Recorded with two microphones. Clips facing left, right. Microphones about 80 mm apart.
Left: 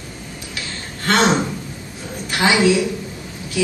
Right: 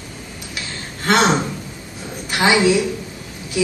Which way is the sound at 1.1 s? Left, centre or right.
Centre.